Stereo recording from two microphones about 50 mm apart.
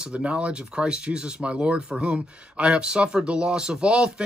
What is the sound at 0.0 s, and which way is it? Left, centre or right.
Speech, right.